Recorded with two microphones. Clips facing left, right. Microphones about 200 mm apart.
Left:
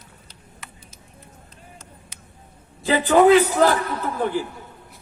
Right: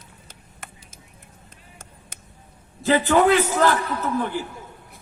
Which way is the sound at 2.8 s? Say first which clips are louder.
Right 2 dB; centre (ahead or behind).